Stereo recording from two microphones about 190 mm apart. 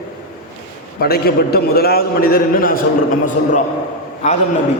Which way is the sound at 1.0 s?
55° left (ahead or behind).